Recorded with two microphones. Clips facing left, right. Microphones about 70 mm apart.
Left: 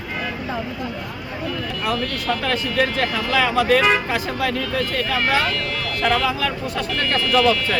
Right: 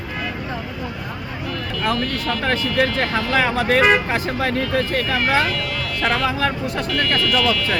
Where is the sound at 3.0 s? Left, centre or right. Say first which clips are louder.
Right 1 dB; right.